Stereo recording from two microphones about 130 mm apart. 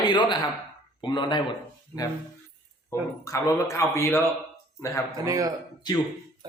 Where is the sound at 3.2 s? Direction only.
25° left (ahead or behind).